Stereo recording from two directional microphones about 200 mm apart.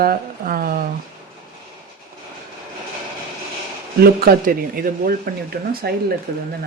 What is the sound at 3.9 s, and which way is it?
Speech, 50° right (ahead or behind).